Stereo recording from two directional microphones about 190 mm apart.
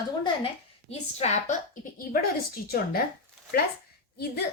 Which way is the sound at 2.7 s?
55° left (ahead or behind).